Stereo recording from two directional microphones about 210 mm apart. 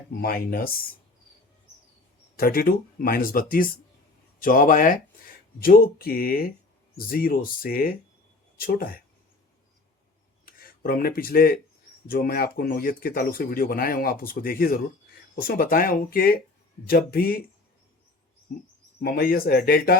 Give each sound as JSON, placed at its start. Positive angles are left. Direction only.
{"t": 0.2, "sound": "speech", "side_deg": 45}
{"t": 2.3, "sound": "speech", "side_deg": 45}
{"t": 10.4, "sound": "speech", "side_deg": 45}
{"t": 18.9, "sound": "speech", "side_deg": 45}